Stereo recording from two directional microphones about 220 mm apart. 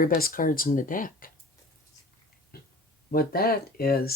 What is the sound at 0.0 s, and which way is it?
Speech, 40° left (ahead or behind).